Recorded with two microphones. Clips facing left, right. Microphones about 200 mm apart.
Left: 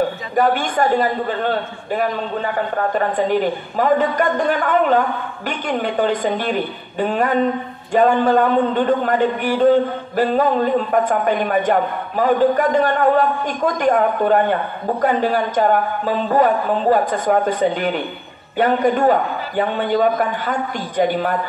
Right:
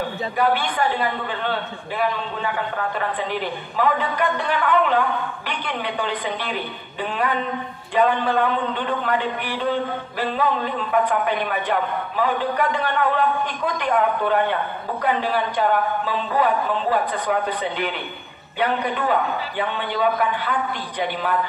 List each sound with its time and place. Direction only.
0.4 s a man's voice: 45° left (ahead or behind)